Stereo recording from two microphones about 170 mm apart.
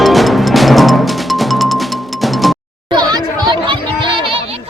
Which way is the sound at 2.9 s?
25° right (ahead or behind).